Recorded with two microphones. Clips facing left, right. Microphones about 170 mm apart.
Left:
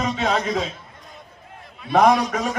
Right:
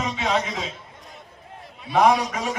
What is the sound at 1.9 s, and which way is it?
Speech, 45° left (ahead or behind).